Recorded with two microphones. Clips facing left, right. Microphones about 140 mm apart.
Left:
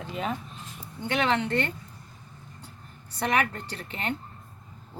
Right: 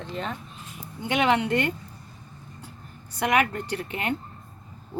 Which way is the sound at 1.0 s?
15° right (ahead or behind).